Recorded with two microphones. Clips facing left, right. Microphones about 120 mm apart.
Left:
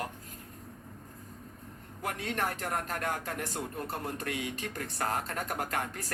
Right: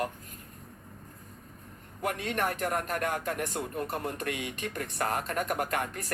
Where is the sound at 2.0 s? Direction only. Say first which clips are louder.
Right 3 dB; 55° right (ahead or behind).